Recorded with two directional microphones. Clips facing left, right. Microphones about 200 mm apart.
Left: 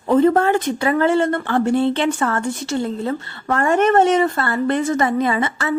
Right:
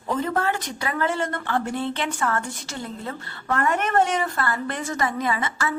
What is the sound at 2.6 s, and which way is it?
A woman's voice, 30° left (ahead or behind).